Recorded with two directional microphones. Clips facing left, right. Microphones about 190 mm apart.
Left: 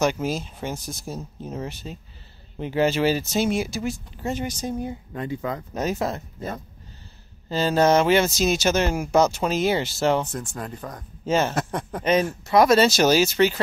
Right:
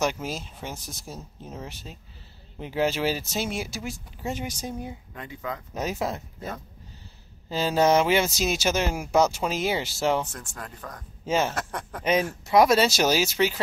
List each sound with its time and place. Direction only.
0.0 s speech: centre (ahead or behind)
5.1 s speech: 35° left (ahead or behind)
5.8 s speech: 5° right (ahead or behind)
10.2 s speech: 20° left (ahead or behind)
11.2 s speech: 5° right (ahead or behind)
11.5 s speech: 20° left (ahead or behind)
12.0 s speech: 10° right (ahead or behind)